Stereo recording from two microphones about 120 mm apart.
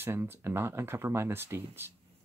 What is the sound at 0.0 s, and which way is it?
Speech, 20° right (ahead or behind).